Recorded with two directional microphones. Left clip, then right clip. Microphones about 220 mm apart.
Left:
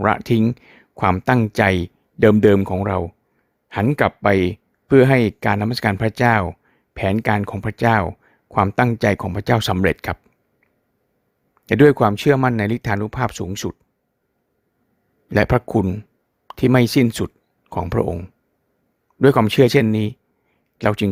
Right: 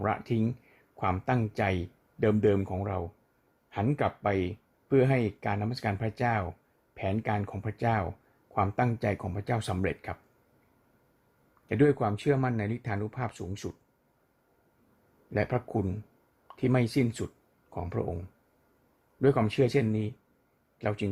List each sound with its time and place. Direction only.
0.0 s speech: 50° left (ahead or behind)
11.6 s speech: 50° left (ahead or behind)
15.3 s speech: 50° left (ahead or behind)